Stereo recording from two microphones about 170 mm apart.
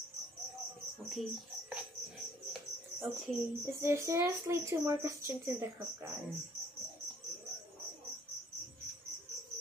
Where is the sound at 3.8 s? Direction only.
15° right (ahead or behind).